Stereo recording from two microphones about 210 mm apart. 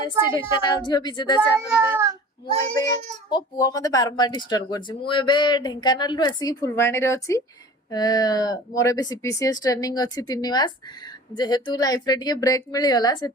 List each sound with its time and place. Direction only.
0.0 s speech: 20° left (ahead or behind)
1.4 s speech: 10° right (ahead or behind)
3.2 s speech: 20° left (ahead or behind)